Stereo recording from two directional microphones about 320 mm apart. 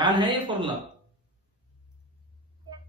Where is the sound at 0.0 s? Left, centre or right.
Centre.